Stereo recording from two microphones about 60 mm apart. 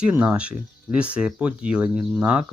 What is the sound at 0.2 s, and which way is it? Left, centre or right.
Speech, right.